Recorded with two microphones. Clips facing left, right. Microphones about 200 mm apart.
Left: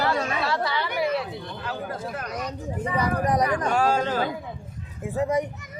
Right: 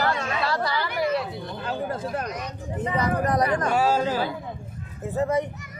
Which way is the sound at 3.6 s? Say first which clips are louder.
Right 1 dB; 5° right (ahead or behind).